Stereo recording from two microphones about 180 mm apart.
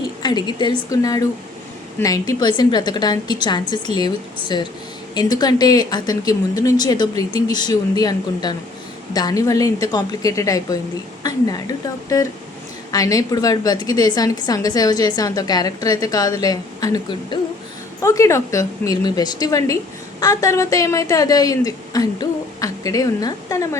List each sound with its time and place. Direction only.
0.2 s a woman's voice: 25° left (ahead or behind)